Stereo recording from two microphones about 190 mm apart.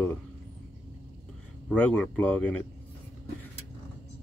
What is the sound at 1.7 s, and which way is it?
Speech, 5° left (ahead or behind).